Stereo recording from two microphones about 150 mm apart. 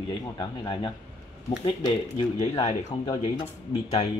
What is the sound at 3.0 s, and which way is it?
Speech, 25° left (ahead or behind).